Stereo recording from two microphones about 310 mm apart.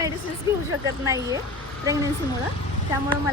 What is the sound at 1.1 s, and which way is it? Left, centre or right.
Speech, centre.